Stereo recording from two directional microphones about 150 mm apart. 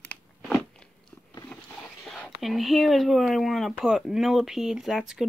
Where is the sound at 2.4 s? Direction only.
Centre (ahead or behind).